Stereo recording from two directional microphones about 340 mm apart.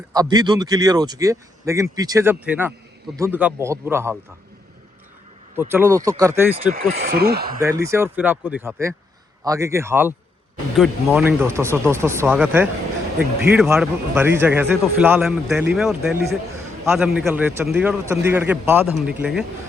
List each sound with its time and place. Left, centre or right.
0.1 s speech: centre
5.5 s speech: centre
6.7 s speech: right
7.6 s speech: centre